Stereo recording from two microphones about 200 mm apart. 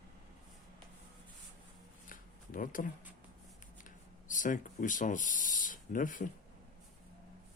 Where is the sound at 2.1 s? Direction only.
45° left (ahead or behind).